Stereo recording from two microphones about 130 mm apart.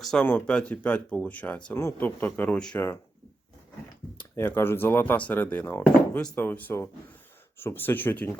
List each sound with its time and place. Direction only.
0.0 s speech: 5° left (ahead or behind)
1.7 s speech: 20° left (ahead or behind)
4.2 s speech: 15° left (ahead or behind)